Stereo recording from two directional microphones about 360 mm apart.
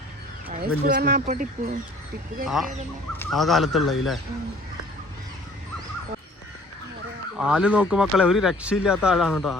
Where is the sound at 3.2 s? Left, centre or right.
Centre.